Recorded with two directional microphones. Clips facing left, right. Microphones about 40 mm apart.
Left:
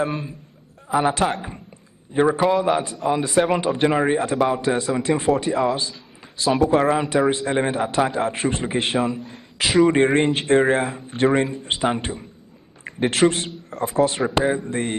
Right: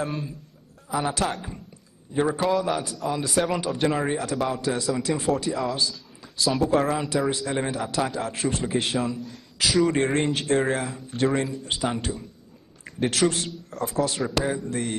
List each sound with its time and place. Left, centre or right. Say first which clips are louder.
0.0 s a man's voice: left 5 dB; left